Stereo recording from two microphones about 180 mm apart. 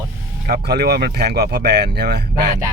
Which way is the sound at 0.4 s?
65° right (ahead or behind).